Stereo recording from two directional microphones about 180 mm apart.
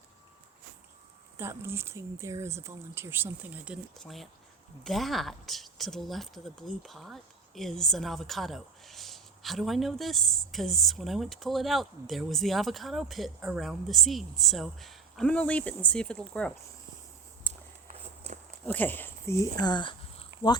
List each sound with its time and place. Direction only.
1.4 s speech: 15° right (ahead or behind); by 16.5 s 5° left (ahead or behind)
17.5 s walk: 40° right (ahead or behind)
18.6 s speech: 10° left (ahead or behind); by 20.2 s 25° left (ahead or behind)